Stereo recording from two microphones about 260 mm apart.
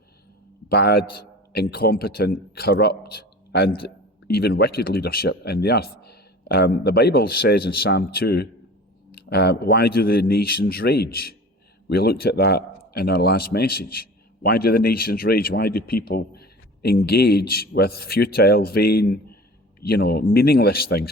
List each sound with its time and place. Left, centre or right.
0.7 s a man's voice: left